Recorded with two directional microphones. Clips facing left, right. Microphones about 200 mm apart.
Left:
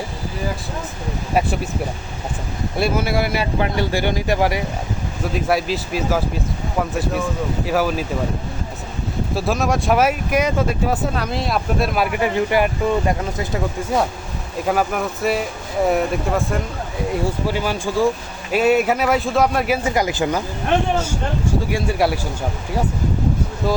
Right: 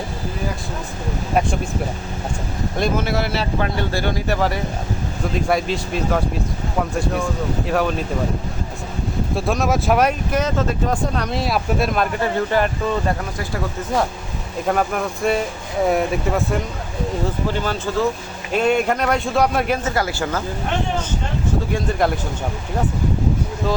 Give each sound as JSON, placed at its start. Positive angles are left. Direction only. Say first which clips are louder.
{"t": 1.3, "sound": "speech", "louder": "even", "side_deg": 5}
{"t": 2.7, "sound": "speech", "louder": "left 1 dB", "side_deg": 10}
{"t": 9.3, "sound": "speech", "louder": "even", "side_deg": 0}
{"t": 14.7, "sound": "speech", "louder": "even", "side_deg": 5}
{"t": 17.1, "sound": "speech", "louder": "left 1 dB", "side_deg": 10}
{"t": 21.7, "sound": "speech", "louder": "even", "side_deg": 10}
{"t": 23.6, "sound": "speech", "louder": "left 1 dB", "side_deg": 10}